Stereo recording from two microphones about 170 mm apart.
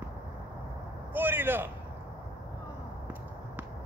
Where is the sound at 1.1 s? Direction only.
10° right (ahead or behind).